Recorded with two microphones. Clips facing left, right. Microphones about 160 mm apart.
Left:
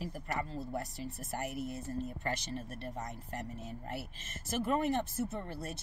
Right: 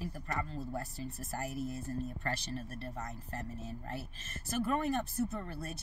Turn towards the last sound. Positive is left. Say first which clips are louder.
# right 1 dB
turn(degrees=25)  # may be behind; listen again after turning